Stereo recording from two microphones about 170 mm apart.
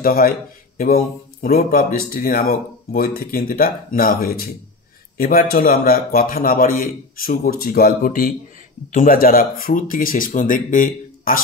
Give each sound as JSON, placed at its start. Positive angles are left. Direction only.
{"t": 0.0, "sound": "speech", "side_deg": 60}